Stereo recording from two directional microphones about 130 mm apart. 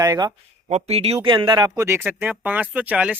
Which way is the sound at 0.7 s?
50° right (ahead or behind).